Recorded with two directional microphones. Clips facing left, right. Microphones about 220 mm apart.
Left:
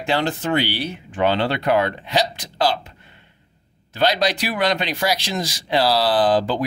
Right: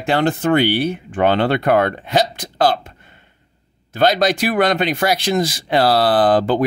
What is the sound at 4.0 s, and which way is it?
Speech, 50° right (ahead or behind).